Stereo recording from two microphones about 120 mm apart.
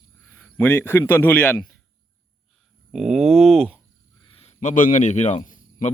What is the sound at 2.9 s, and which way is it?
Speech, centre (ahead or behind).